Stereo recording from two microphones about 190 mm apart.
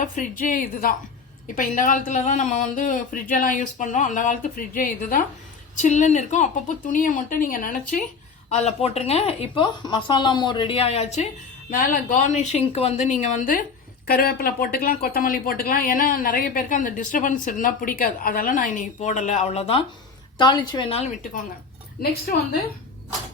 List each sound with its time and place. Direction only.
0.0 s speech: 45° left (ahead or behind)
8.5 s speech: 35° left (ahead or behind)
11.7 s a woman's voice: 45° left (ahead or behind)